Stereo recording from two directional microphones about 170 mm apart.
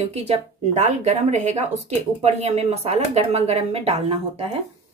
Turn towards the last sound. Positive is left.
turn(degrees=-35)  # may be behind; listen again after turning